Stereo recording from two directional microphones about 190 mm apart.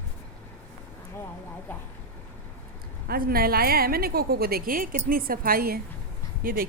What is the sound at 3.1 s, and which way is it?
A woman's voice, 50° right (ahead or behind).